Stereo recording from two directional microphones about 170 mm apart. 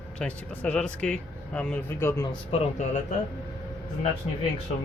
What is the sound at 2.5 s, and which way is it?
Speech, 45° left (ahead or behind).